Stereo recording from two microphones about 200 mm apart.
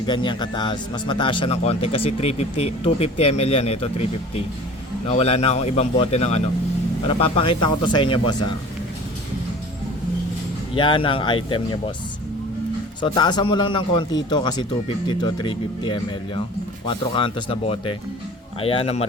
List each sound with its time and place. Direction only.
0.0 s speech: 25° left (ahead or behind)
5.0 s a man's voice: 30° left (ahead or behind)
10.8 s speech: 25° left (ahead or behind)
13.0 s speech: 20° left (ahead or behind)